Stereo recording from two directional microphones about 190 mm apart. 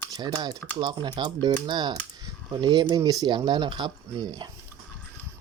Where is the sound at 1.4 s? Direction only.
20° right (ahead or behind).